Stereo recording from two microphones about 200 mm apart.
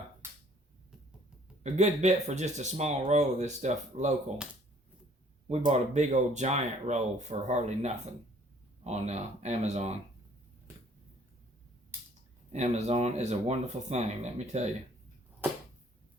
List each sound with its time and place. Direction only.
1.6 s speech: 35° right (ahead or behind)
5.5 s speech: 35° right (ahead or behind)
12.5 s speech: 35° right (ahead or behind)